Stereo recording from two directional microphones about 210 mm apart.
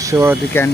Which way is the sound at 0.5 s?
10° left (ahead or behind).